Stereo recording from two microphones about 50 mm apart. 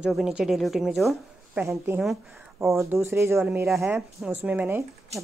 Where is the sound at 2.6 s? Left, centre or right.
Right.